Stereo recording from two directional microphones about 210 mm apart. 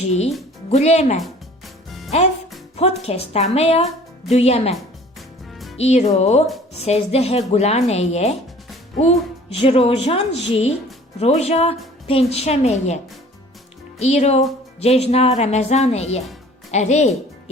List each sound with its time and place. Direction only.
0.7 s speech: 30° left (ahead or behind)
1.2 s music: centre (ahead or behind)
2.0 s a woman's voice: 30° left (ahead or behind)
14.0 s speech: 30° left (ahead or behind)